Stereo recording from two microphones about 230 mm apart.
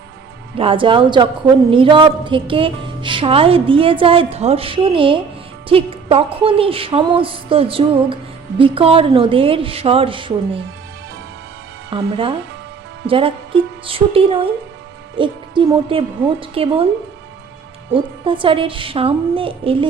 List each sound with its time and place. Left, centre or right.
0.5 s speech: right
11.9 s speech: right
17.9 s speech: right